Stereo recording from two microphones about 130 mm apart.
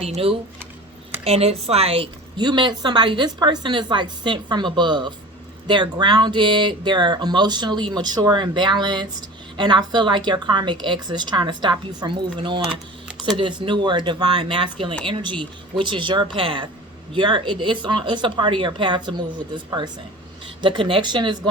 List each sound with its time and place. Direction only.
0.0 s a woman's voice: 50° right (ahead or behind)
2.4 s speech: 35° right (ahead or behind)